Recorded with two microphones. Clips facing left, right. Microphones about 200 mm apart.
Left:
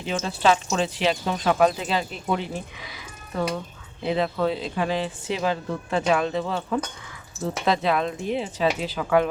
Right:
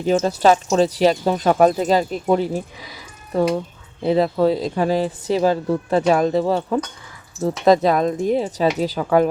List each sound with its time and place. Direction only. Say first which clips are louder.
0.0 s speech: right 7 dB; 40° right (ahead or behind)
4.0 s speech: right 7 dB; 35° right (ahead or behind)